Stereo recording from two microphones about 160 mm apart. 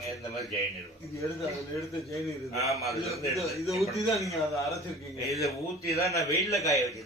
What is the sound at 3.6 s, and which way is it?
A man's voice, centre (ahead or behind).